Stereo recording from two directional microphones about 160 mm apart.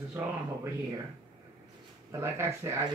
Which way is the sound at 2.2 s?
15° right (ahead or behind).